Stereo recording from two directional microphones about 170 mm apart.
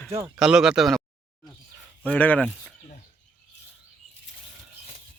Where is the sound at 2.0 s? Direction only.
10° left (ahead or behind).